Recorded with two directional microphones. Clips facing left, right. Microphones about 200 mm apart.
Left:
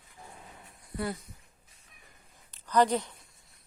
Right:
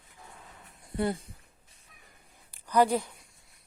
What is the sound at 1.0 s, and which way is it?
Speech, 25° right (ahead or behind).